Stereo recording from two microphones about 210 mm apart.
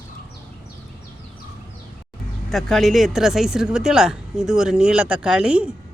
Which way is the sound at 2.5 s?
Centre (ahead or behind).